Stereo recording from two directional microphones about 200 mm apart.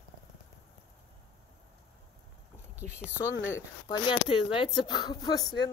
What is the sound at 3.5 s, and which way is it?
Speech, 20° left (ahead or behind).